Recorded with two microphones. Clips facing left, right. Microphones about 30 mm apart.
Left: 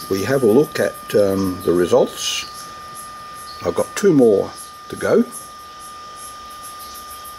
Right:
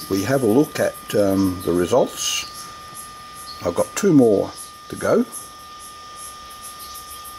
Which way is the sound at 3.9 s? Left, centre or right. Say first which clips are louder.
Left 3 dB; left.